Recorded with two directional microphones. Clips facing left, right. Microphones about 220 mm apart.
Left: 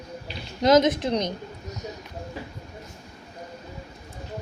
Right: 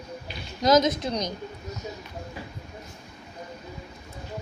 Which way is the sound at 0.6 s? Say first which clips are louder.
Left 2 dB; 30° left (ahead or behind).